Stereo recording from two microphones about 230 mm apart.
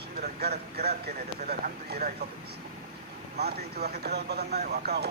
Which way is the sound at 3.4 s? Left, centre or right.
Right.